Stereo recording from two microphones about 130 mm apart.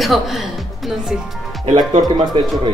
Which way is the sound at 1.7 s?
35° right (ahead or behind).